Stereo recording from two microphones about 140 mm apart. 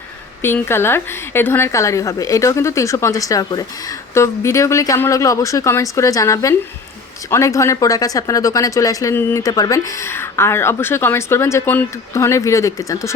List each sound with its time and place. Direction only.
0.4 s speech: 15° left (ahead or behind)